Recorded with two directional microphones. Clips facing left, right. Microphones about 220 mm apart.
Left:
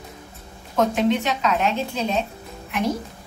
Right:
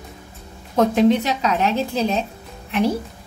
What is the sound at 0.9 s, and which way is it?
A woman's voice, 35° right (ahead or behind).